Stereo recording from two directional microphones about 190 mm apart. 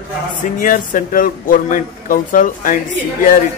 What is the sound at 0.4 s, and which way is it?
A man's voice, 45° left (ahead or behind).